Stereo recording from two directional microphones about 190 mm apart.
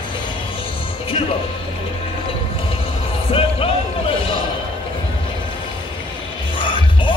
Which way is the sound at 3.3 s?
30° left (ahead or behind).